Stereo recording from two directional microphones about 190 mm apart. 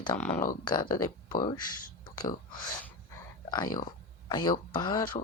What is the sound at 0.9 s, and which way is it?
Speech, 50° left (ahead or behind).